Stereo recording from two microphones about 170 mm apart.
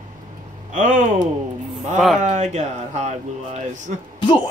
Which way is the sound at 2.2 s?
45° right (ahead or behind).